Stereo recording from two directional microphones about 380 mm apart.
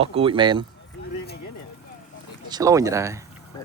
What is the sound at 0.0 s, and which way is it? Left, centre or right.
Speech, centre.